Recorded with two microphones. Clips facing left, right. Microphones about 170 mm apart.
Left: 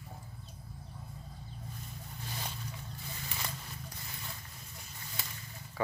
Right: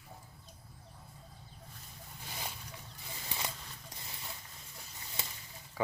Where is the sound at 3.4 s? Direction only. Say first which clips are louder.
Left 1 dB; 20° right (ahead or behind).